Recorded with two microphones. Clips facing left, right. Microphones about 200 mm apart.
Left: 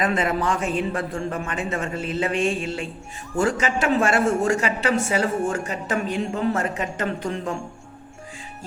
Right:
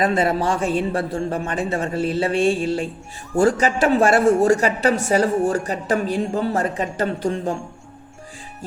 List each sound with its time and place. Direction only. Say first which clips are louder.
0.0 s a woman's voice: right 3 dB; 35° right (ahead or behind)